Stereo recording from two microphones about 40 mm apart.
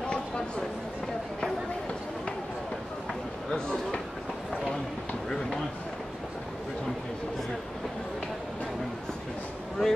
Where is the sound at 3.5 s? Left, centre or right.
Centre.